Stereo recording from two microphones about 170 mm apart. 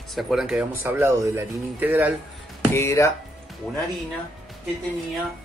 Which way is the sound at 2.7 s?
15° left (ahead or behind).